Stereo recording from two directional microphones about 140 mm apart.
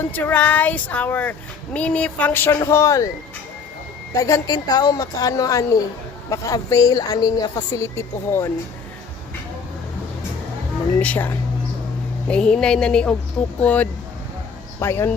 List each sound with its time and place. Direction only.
0.0 s speech: 15° left (ahead or behind)
4.1 s a woman's voice: 25° left (ahead or behind)
11.0 s speech: 10° left (ahead or behind)
12.3 s speech: 5° left (ahead or behind)